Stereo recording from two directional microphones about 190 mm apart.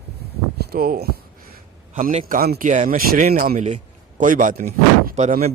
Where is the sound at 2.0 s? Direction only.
45° right (ahead or behind).